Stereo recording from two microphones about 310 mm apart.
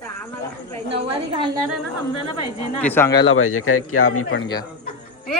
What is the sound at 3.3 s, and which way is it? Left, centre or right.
A man's voice, left.